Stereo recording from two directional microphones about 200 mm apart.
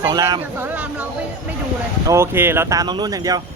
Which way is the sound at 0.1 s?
20° right (ahead or behind).